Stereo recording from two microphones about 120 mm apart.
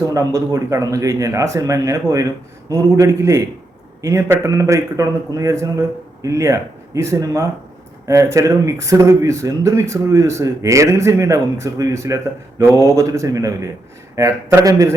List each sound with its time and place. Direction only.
0.1 s speech: 30° right (ahead or behind)